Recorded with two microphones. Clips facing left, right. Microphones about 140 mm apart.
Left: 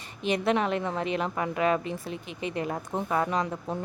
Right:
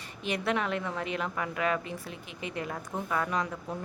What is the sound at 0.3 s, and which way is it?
A woman's voice, 20° left (ahead or behind).